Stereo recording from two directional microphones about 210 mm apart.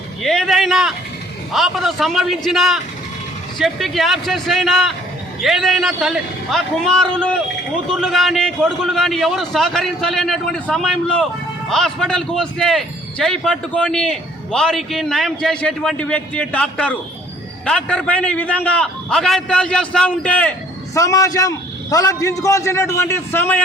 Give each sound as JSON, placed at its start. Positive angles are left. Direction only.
{"t": 0.2, "sound": "a man's voice", "side_deg": 0}